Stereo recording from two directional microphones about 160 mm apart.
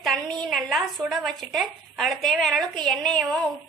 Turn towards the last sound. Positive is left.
turn(degrees=0)  # may be behind; listen again after turning